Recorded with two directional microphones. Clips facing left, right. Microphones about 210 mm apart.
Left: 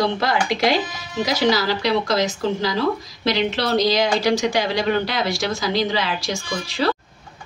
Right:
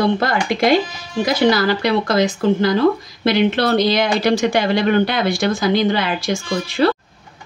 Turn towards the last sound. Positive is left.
turn(degrees=-55)  # may be behind; listen again after turning